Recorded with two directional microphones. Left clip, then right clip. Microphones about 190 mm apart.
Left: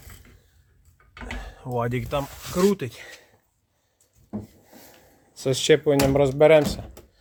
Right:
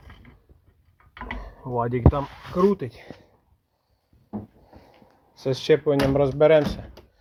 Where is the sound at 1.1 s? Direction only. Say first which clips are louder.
Right 2 dB; 40° left (ahead or behind).